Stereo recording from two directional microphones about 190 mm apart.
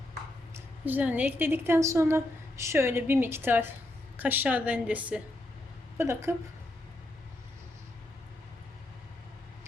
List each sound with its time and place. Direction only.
0.5 s a woman's voice: 10° right (ahead or behind)